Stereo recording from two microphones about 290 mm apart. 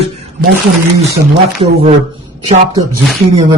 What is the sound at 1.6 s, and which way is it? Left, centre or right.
Speech, centre.